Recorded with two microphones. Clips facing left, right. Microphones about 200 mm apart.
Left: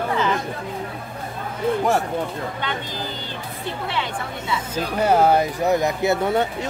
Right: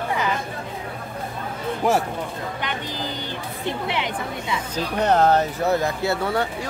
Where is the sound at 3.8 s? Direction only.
20° right (ahead or behind).